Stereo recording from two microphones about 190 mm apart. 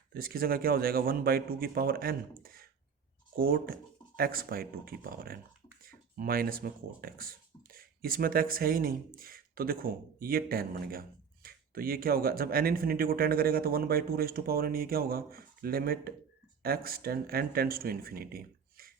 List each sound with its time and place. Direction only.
0.1 s speech: 50° right (ahead or behind)